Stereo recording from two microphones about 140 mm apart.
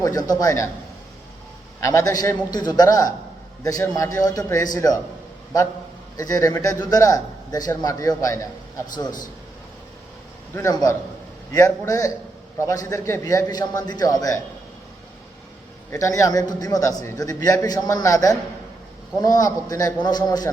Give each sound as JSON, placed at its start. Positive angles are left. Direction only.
{"t": 0.0, "sound": "a man's voice", "side_deg": 25}
{"t": 1.8, "sound": "a man's voice", "side_deg": 20}
{"t": 6.1, "sound": "a man's voice", "side_deg": 25}
{"t": 10.5, "sound": "a man's voice", "side_deg": 20}
{"t": 15.9, "sound": "a man's voice", "side_deg": 25}